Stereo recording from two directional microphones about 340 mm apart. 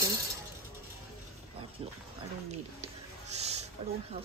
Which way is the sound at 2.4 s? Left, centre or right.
Centre.